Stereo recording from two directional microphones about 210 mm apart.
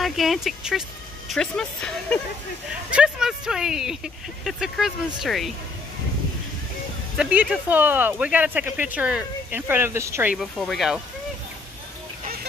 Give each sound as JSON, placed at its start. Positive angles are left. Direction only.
{"t": 0.0, "sound": "speech", "side_deg": 0}
{"t": 7.2, "sound": "speech", "side_deg": -5}
{"t": 10.3, "sound": "speech", "side_deg": 0}